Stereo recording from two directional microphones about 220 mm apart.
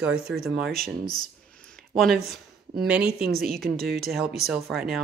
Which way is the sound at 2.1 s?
45° right (ahead or behind).